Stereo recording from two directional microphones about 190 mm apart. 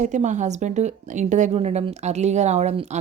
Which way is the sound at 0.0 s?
40° right (ahead or behind).